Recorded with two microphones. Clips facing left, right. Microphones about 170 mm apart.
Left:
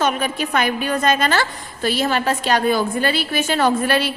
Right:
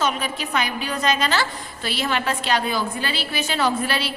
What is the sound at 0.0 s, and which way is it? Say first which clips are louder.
A woman's voice: left 4 dB; 50° left (ahead or behind).